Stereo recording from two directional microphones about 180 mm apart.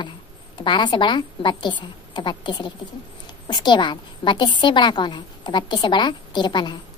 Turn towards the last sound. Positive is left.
turn(degrees=25)  # may be behind; listen again after turning